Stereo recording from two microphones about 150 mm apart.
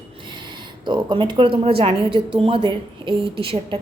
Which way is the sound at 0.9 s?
30° right (ahead or behind).